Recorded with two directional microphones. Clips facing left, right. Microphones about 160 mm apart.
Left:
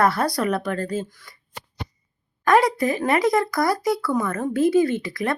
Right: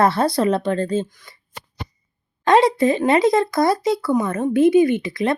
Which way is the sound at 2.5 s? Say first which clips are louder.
Right 3 dB; 25° right (ahead or behind).